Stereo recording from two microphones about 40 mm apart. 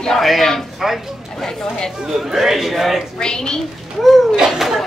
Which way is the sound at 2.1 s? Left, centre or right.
Centre.